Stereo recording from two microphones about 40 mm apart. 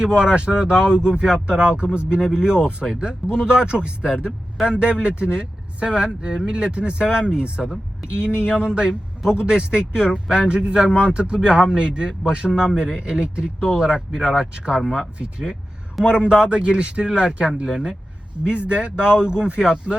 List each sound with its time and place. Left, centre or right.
0.0 s speech: right
2.8 s speech: centre
3.3 s speech: right
13.6 s speech: centre
16.0 s speech: centre
18.4 s speech: right